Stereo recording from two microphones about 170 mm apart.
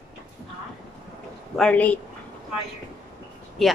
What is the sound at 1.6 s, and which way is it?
Speech, 5° left (ahead or behind).